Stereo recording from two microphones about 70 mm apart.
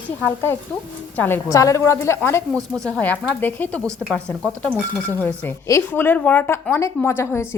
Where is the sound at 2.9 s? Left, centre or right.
Centre.